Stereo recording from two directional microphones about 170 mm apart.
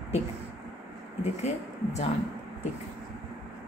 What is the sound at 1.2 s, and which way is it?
Speech, 40° left (ahead or behind).